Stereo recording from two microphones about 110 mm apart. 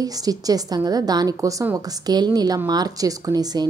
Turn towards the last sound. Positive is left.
turn(degrees=-35)  # may be behind; listen again after turning